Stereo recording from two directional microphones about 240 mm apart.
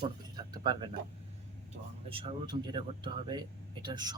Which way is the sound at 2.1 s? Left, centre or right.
Centre.